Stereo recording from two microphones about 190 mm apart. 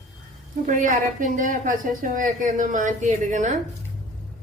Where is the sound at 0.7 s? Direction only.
45° right (ahead or behind).